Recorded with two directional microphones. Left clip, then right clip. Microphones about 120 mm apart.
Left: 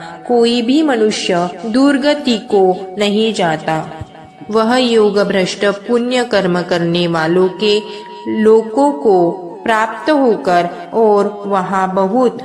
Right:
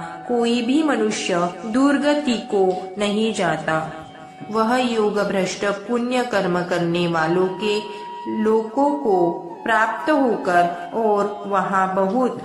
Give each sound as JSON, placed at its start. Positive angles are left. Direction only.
{"t": 0.4, "sound": "a woman's voice", "side_deg": 35}